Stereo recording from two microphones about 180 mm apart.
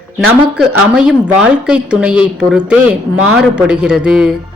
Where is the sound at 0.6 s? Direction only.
5° right (ahead or behind).